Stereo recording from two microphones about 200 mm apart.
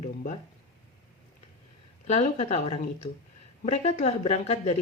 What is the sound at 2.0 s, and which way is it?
Speech, 35° left (ahead or behind).